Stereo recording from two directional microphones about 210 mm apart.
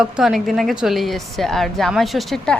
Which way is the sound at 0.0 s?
Centre (ahead or behind).